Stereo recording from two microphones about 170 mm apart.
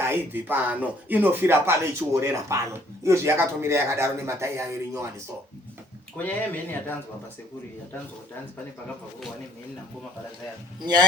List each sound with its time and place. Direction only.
0.0 s speech: 15° right (ahead or behind)
6.1 s speech: 10° left (ahead or behind)